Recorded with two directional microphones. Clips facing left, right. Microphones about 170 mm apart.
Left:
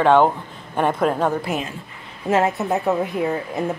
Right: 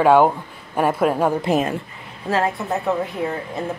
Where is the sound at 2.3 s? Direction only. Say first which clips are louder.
Left 2 dB; 20° left (ahead or behind).